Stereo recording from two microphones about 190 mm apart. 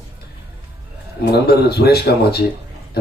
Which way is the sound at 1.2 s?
60° left (ahead or behind).